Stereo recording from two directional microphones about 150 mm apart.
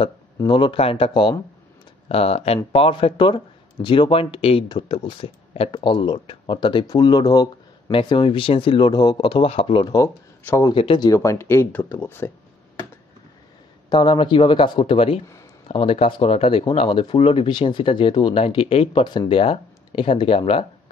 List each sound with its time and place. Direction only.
0.5 s speech: 35° left (ahead or behind)
10.0 s speech: 20° left (ahead or behind)
10.7 s speech: 35° left (ahead or behind)
11.1 s speech: 20° left (ahead or behind)
13.8 s speech: 30° left (ahead or behind)